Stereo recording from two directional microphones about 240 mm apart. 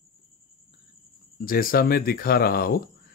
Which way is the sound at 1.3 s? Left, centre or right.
Left.